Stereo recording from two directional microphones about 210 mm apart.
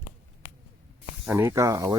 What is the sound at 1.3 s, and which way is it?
Speech, 15° right (ahead or behind).